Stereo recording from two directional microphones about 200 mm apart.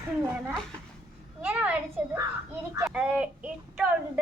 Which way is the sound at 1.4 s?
10° right (ahead or behind).